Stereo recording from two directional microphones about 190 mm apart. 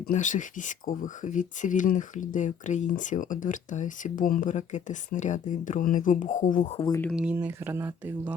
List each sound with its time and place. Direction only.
0.0 s speech: 40° left (ahead or behind)
6.7 s speech: 25° left (ahead or behind)
7.0 s speech: centre (ahead or behind)